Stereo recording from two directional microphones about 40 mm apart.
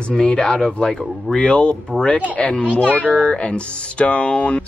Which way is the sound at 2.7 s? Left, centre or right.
Left.